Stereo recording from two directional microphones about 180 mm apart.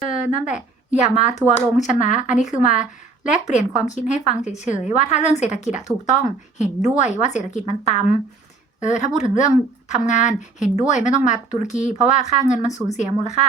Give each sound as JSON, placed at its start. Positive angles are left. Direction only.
{"t": 0.0, "sound": "a woman's voice", "side_deg": 45}